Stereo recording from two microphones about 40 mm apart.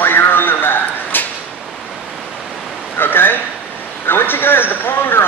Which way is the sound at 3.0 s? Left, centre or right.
Left.